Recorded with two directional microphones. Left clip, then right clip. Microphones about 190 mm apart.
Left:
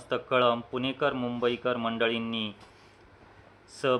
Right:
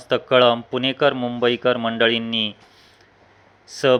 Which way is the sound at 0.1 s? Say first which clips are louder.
Right 9 dB; 20° right (ahead or behind).